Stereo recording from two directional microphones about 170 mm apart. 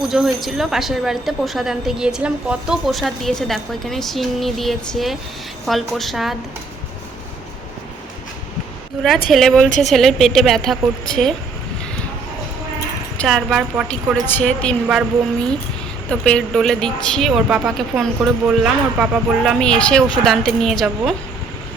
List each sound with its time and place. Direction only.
0.1 s a woman's voice: centre (ahead or behind)
9.3 s a woman's voice: centre (ahead or behind)
9.6 s speech: 45° left (ahead or behind)
9.9 s a woman's voice: centre (ahead or behind)
13.1 s a woman's voice: centre (ahead or behind)
14.3 s a woman's voice: 5° left (ahead or behind)
16.0 s a woman's voice: 5° left (ahead or behind)